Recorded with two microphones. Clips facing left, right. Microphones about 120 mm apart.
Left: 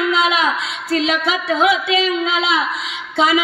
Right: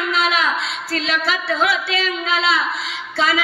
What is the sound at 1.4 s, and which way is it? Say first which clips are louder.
Speech: left 6 dB; 15° left (ahead or behind).